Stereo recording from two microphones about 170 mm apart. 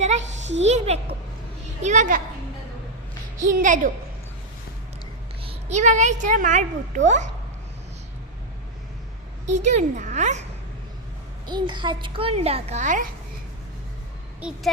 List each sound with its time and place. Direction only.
0.5 s a child's voice: 40° right (ahead or behind)
3.4 s a woman's voice: 50° right (ahead or behind)
5.4 s speech: 35° right (ahead or behind)
9.5 s a woman's voice: 45° right (ahead or behind)
11.4 s a child's voice: 25° right (ahead or behind); by 13.1 s 45° right (ahead or behind)